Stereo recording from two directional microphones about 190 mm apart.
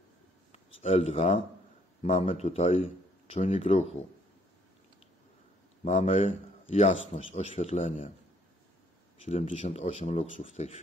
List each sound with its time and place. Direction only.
0.7 s speech: 35° left (ahead or behind)
5.9 s speech: 40° left (ahead or behind)
9.2 s speech: 35° left (ahead or behind)